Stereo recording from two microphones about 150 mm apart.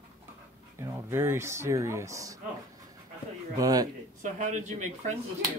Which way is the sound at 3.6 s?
25° right (ahead or behind).